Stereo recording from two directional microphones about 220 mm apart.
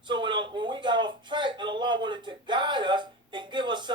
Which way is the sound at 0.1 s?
20° right (ahead or behind).